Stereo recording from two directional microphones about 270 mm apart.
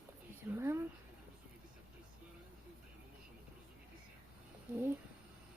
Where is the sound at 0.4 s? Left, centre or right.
Centre.